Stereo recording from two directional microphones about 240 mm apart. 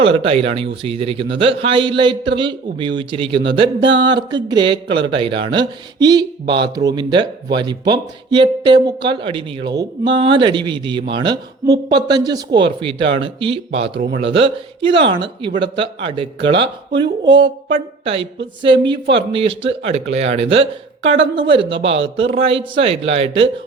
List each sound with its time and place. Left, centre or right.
0.0 s a woman's voice: right